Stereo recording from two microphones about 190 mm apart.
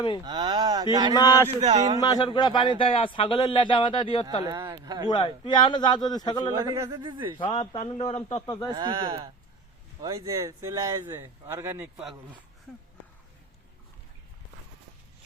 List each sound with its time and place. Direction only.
0.3 s speech: 25° right (ahead or behind)
1.1 s speech: 20° left (ahead or behind)
1.6 s speech: 35° right (ahead or behind)
2.0 s speech: 20° left (ahead or behind)
4.4 s speech: 20° right (ahead or behind)
5.0 s speech: 25° left (ahead or behind)
6.7 s speech: 20° right (ahead or behind)
7.3 s a man's voice: 30° left (ahead or behind)
8.7 s speech: 25° right (ahead or behind)
12.7 s speech: centre (ahead or behind)